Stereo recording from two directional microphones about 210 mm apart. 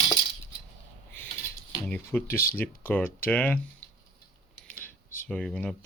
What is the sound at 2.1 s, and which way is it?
Speech, 10° left (ahead or behind).